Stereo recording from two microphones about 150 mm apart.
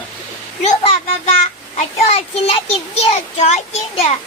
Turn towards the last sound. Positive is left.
turn(degrees=45)  # may be behind; listen again after turning